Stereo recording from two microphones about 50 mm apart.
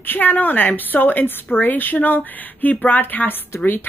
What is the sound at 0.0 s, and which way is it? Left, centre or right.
A woman's voice, left.